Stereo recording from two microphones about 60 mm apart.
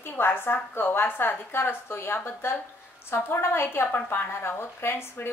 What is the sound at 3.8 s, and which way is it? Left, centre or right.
A woman's voice, left.